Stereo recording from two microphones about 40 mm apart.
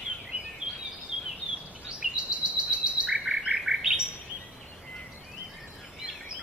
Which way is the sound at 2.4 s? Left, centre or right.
Right.